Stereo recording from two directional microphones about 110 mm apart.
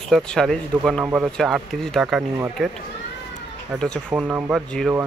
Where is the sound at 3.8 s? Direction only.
5° left (ahead or behind).